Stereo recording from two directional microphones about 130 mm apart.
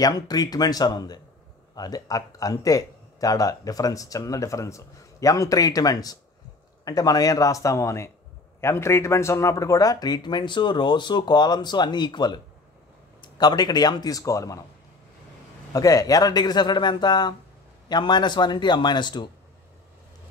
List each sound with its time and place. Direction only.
0.0 s speech: 30° left (ahead or behind)
15.7 s speech: 25° left (ahead or behind)